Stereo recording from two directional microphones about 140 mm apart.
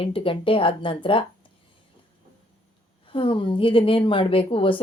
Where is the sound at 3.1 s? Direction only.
40° left (ahead or behind).